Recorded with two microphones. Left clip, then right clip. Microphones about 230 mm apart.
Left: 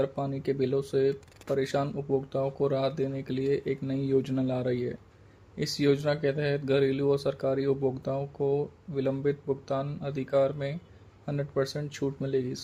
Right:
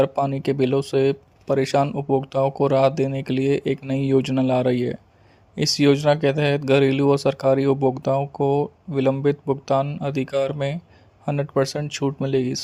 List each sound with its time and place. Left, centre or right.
0.0 s speech: right